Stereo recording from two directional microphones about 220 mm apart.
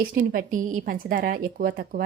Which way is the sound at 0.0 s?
40° right (ahead or behind).